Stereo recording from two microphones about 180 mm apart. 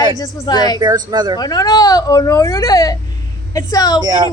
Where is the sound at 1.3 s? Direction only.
20° left (ahead or behind).